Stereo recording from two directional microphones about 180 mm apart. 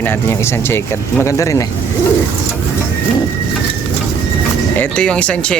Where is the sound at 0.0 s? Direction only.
10° left (ahead or behind).